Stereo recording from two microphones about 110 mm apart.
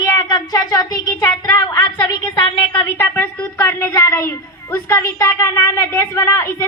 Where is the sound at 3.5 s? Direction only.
25° left (ahead or behind).